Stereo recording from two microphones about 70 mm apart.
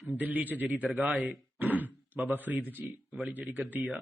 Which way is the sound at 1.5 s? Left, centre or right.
Right.